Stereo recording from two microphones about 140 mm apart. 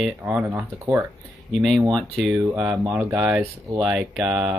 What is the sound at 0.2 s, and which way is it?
Speech, 10° right (ahead or behind).